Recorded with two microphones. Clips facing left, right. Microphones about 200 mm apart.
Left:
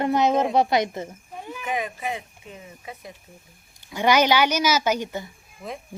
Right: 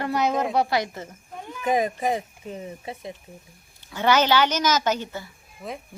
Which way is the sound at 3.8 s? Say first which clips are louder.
Left 1 dB; 15° left (ahead or behind).